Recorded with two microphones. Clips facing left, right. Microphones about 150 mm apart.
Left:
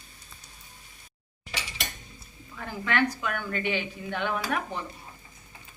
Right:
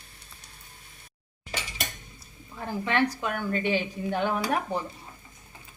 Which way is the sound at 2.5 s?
30° right (ahead or behind).